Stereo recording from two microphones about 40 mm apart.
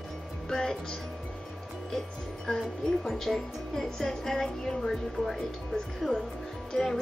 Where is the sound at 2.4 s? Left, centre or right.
Centre.